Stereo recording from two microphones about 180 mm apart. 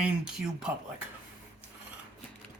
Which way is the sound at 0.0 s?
5° right (ahead or behind).